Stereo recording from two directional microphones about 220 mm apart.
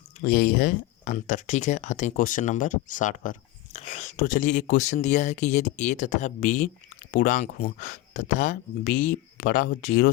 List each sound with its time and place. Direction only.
0.3 s speech: 40° left (ahead or behind)